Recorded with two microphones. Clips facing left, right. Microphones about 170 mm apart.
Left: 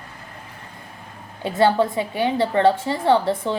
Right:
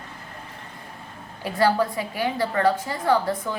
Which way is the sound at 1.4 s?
25° left (ahead or behind).